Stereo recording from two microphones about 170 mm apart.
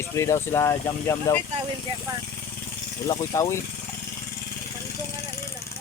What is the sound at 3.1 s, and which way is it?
Speech, 15° left (ahead or behind).